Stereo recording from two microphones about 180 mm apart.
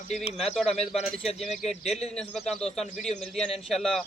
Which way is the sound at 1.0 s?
Centre (ahead or behind).